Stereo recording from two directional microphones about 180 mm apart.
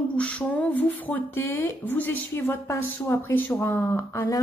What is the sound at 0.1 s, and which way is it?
Speech, 5° left (ahead or behind).